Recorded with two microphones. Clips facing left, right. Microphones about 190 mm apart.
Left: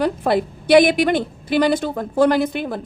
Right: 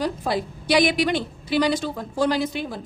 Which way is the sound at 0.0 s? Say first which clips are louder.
Left 6 dB; 60° left (ahead or behind).